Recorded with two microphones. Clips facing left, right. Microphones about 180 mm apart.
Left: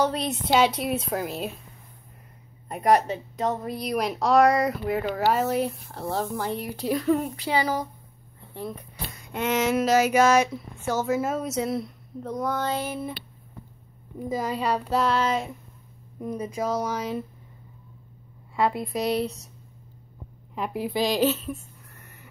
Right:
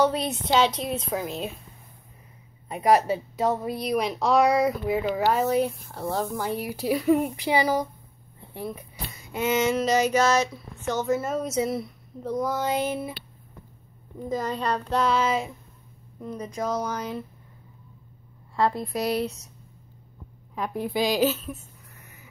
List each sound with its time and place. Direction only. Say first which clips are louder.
0.0 s speech: right 2 dB; centre (ahead or behind)
2.7 s speech: right 1 dB; 5° right (ahead or behind)
12.7 s a sound: right 3 dB; 20° right (ahead or behind)
14.3 s speech: left 1 dB; 5° left (ahead or behind)
16.2 s speech: left 2 dB; 10° left (ahead or behind)
18.6 s speech: even; 5° left (ahead or behind)
20.5 s speech: even; 5° left (ahead or behind)